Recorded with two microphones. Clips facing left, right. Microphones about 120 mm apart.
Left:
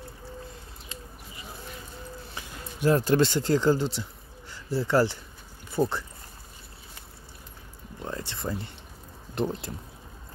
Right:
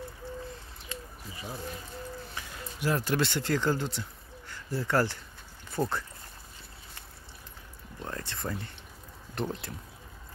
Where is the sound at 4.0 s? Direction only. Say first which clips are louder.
Left 3 dB; 30° left (ahead or behind).